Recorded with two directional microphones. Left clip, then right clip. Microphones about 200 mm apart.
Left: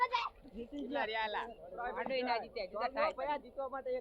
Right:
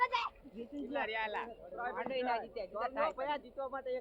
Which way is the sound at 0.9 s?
45° left (ahead or behind).